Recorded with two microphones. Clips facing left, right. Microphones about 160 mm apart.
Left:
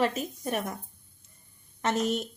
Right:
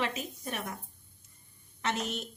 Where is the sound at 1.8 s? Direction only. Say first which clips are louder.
Left 6 dB; 45° left (ahead or behind).